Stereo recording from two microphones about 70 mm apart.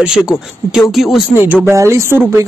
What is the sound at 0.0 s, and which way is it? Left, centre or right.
Speech, centre.